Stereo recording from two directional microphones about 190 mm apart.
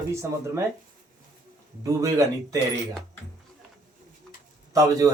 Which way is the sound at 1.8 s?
20° right (ahead or behind).